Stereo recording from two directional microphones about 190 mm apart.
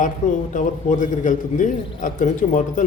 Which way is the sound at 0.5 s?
40° left (ahead or behind).